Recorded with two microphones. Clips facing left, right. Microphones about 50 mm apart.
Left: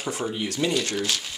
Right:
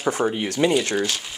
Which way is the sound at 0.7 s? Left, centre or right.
Centre.